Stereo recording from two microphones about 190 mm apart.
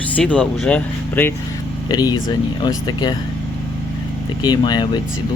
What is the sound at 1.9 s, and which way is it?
Speech, 20° left (ahead or behind).